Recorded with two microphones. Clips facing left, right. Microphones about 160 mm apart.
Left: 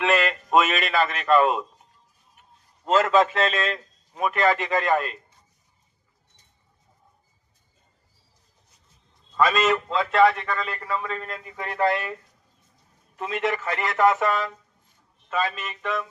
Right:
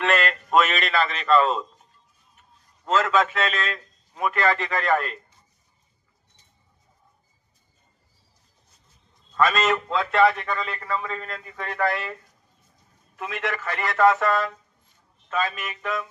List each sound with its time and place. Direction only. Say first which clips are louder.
0.0 s a man's voice: left 1 dB; 10° left (ahead or behind)
2.8 s a man's voice: left 2 dB; 35° left (ahead or behind); by 5.1 s 15° left (ahead or behind)
9.3 s a man's voice: left 1 dB; 5° left (ahead or behind)
11.3 s a man's voice: even; 15° left (ahead or behind)
13.1 s a man's voice: left 4 dB; 20° left (ahead or behind)
15.5 s a man's voice: even; centre (ahead or behind)